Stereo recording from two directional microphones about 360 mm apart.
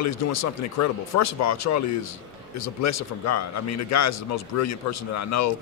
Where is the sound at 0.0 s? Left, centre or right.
Left.